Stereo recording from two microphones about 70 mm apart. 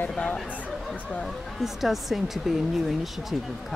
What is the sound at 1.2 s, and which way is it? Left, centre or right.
Speech, centre.